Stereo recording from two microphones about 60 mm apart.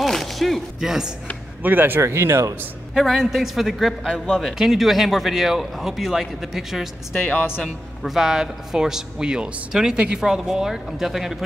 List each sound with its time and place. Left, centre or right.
0.0 s a sound: centre
0.7 s a man's voice: centre
1.6 s speech: right
2.0 s speech: right
2.9 s a man's voice: centre